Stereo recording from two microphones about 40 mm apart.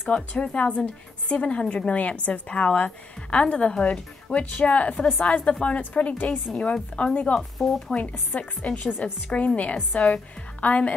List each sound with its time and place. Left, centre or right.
0.1 s a woman's voice: left
6.5 s a woman's voice: left
7.5 s speech: centre
7.9 s a woman's voice: left
9.0 s a woman's voice: left